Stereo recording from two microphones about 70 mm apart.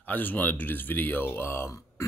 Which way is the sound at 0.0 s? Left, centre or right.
Left.